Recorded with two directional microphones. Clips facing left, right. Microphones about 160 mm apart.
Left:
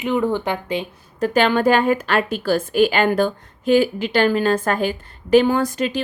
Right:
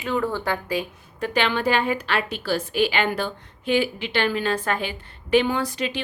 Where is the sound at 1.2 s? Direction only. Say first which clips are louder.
Left 6 dB; 45° left (ahead or behind).